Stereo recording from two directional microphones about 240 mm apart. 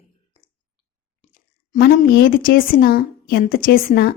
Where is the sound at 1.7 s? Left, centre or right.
Left.